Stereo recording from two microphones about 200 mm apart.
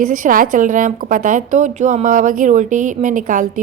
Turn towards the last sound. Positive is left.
turn(degrees=-40)  # may be behind; listen again after turning